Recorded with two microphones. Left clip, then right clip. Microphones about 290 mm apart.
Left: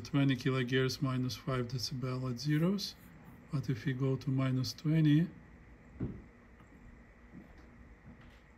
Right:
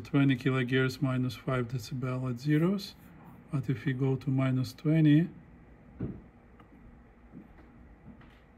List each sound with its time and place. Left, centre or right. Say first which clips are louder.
0.0 s speech: right 5 dB; centre